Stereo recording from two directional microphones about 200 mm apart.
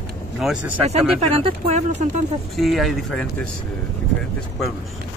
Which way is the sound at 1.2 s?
30° right (ahead or behind).